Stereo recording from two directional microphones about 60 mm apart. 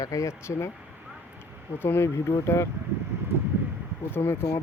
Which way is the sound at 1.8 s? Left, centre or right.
Left.